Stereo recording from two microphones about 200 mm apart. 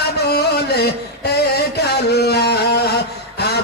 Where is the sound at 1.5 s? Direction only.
55° left (ahead or behind).